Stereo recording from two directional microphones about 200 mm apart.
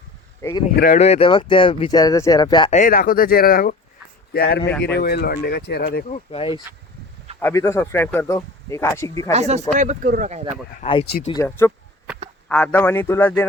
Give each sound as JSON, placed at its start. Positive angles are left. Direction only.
{"t": 0.9, "sound": "speech", "side_deg": 30}
{"t": 2.7, "sound": "speech", "side_deg": 45}
{"t": 4.4, "sound": "speech", "side_deg": 60}
{"t": 4.7, "sound": "speech", "side_deg": 5}
{"t": 4.9, "sound": "speech", "side_deg": 50}
{"t": 6.1, "sound": "speech", "side_deg": 30}
{"t": 7.3, "sound": "speech", "side_deg": 10}
{"t": 9.3, "sound": "speech", "side_deg": -35}
{"t": 10.8, "sound": "speech", "side_deg": 35}
{"t": 11.3, "sound": "speech", "side_deg": 15}